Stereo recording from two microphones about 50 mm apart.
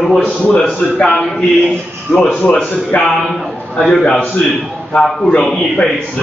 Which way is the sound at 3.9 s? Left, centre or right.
Centre.